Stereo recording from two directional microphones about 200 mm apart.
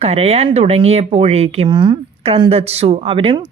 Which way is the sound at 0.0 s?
30° right (ahead or behind).